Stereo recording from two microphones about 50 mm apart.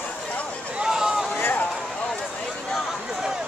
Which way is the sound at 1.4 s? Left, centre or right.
Left.